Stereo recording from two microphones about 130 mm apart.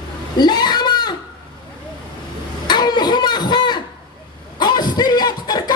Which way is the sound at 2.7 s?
35° left (ahead or behind).